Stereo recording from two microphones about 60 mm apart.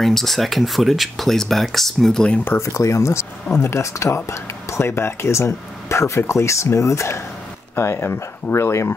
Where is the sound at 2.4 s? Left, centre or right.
Left.